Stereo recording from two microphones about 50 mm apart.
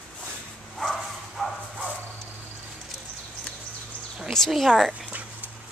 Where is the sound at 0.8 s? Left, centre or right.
Centre.